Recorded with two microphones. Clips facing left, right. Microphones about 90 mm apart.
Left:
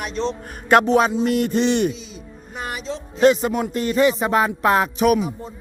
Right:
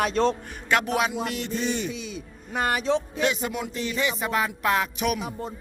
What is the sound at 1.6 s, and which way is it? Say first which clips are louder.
Speech: left 7 dB; 75° left (ahead or behind).